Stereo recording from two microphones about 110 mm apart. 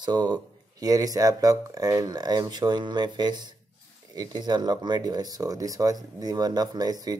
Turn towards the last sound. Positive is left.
turn(degrees=-35)  # may be behind; listen again after turning